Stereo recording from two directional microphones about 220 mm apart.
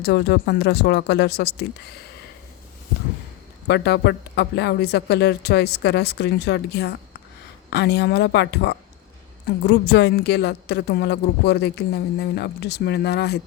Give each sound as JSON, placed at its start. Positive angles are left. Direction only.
{"t": 0.0, "sound": "speech", "side_deg": 45}
{"t": 3.7, "sound": "speech", "side_deg": 50}